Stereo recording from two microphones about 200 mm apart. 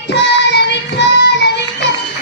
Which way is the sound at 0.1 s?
60° left (ahead or behind).